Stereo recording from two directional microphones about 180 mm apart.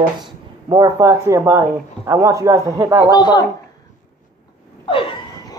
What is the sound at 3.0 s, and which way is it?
Speech, 25° left (ahead or behind).